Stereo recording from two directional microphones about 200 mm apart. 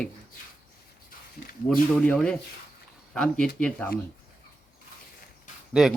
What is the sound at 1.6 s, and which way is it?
Speech, 5° left (ahead or behind).